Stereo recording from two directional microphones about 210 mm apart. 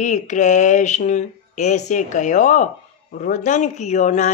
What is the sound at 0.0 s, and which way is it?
A woman's voice, 35° left (ahead or behind).